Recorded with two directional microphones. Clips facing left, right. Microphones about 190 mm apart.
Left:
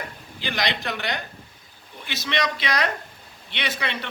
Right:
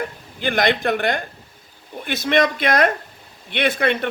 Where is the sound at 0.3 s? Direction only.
50° right (ahead or behind).